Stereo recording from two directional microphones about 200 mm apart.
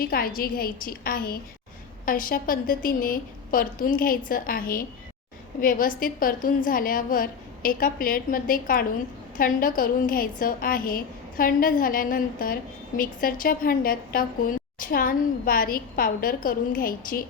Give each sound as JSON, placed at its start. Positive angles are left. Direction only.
{"t": 0.0, "sound": "a woman's voice", "side_deg": 45}